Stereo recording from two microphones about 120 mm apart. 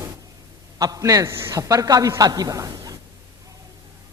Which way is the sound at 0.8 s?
30° right (ahead or behind).